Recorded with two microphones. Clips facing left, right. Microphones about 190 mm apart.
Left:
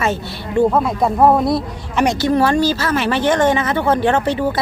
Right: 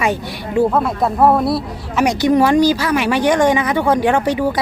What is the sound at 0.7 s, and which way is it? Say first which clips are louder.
Speech: left 1 dB; centre (ahead or behind).